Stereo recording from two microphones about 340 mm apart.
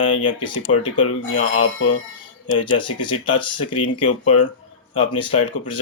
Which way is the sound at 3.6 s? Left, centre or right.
Left.